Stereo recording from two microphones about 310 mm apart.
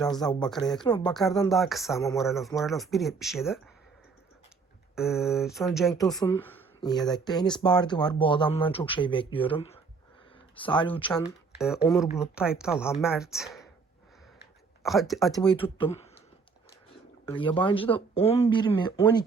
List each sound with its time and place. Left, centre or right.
0.0 s speech: centre
4.9 s speech: centre
11.6 s speech: centre
14.8 s speech: centre
17.2 s speech: centre